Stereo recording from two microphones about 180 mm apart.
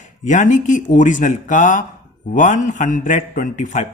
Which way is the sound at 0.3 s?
45° left (ahead or behind).